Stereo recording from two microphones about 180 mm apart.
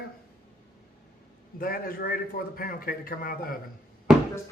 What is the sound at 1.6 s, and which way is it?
A man's voice, 55° left (ahead or behind).